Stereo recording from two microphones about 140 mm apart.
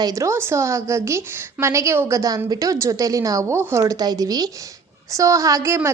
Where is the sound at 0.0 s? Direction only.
25° right (ahead or behind).